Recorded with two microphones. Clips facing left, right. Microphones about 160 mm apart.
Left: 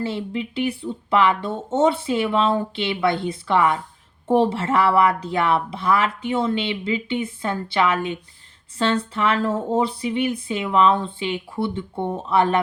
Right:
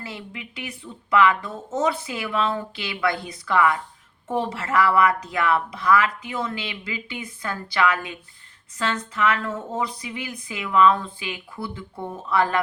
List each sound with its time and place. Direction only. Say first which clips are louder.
0.0 s a woman's voice: left 11 dB; 30° left (ahead or behind)